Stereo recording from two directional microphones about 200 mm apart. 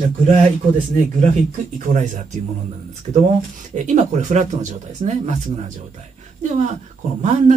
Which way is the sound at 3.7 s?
35° right (ahead or behind).